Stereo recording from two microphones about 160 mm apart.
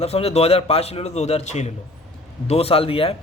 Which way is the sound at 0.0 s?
40° left (ahead or behind).